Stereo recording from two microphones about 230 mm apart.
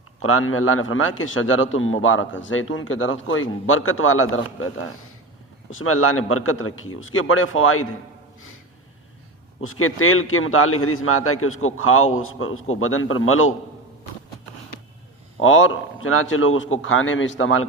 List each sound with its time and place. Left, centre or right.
0.2 s a man's voice: left
9.6 s a man's voice: left
15.4 s a man's voice: left